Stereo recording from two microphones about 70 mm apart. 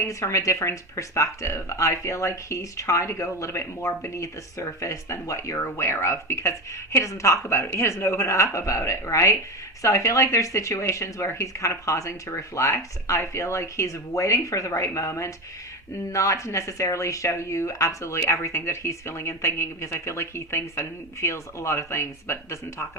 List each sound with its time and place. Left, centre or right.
0.0 s speech: left